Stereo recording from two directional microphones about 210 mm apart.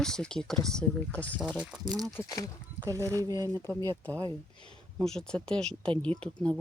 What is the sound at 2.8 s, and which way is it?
Speech, 15° right (ahead or behind).